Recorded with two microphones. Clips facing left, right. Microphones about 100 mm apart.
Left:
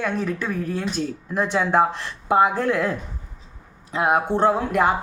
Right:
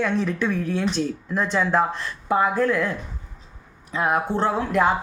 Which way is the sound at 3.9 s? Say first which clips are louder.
Left 2 dB; 20° left (ahead or behind).